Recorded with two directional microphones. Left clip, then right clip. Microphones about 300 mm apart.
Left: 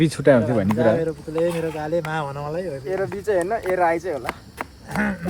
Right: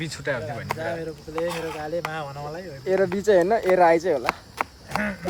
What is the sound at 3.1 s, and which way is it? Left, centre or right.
Speech, right.